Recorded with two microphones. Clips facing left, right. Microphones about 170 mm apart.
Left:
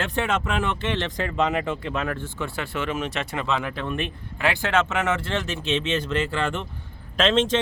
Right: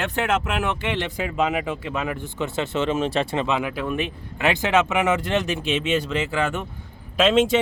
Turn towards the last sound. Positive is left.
turn(degrees=-10)  # may be behind; listen again after turning